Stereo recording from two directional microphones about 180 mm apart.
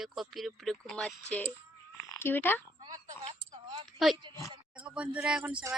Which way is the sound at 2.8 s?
30° right (ahead or behind).